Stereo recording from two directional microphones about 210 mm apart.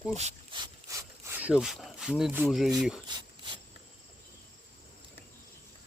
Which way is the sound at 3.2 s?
20° right (ahead or behind).